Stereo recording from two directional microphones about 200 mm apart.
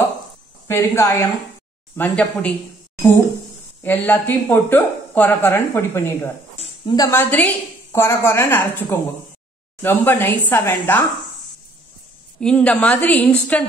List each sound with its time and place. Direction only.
0.7 s speech: 10° left (ahead or behind)
3.8 s speech: 10° left (ahead or behind)
6.6 s a sound: 25° left (ahead or behind)
7.1 s speech: 10° left (ahead or behind)
12.4 s speech: 5° left (ahead or behind)